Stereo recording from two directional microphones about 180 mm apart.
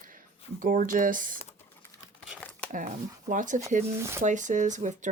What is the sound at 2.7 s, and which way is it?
Speech, 45° right (ahead or behind).